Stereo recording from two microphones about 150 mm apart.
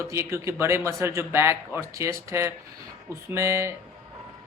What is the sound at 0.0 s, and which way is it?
A man's voice, 20° right (ahead or behind).